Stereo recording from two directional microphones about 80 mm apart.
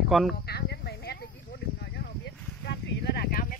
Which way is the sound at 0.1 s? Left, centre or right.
Centre.